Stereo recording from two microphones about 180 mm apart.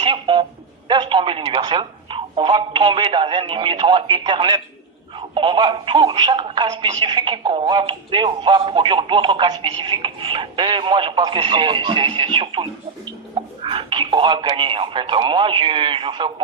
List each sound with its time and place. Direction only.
0.0 s telephone: 25° right (ahead or behind)
0.9 s speech: 25° right (ahead or behind)